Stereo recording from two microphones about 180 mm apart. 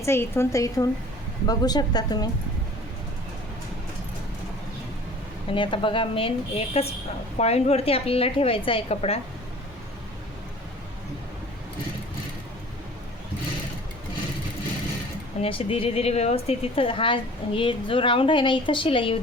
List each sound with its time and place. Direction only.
0.0 s a woman's voice: 15° left (ahead or behind)
5.5 s a woman's voice: 30° left (ahead or behind)
15.4 s a woman's voice: 30° left (ahead or behind)